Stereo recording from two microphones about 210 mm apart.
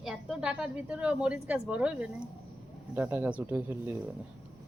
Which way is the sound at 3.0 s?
10° right (ahead or behind).